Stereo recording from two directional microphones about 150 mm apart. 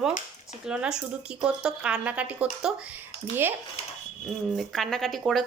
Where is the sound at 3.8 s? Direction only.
45° left (ahead or behind).